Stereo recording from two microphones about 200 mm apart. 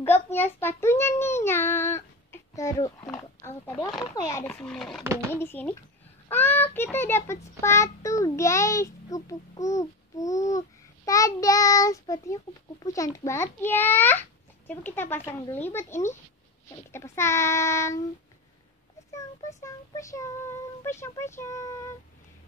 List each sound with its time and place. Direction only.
0.0 s child singing: 10° left (ahead or behind)
3.1 s a sound: 10° left (ahead or behind)
4.0 s a child's voice: 20° left (ahead or behind)
19.1 s a child's voice: 15° left (ahead or behind)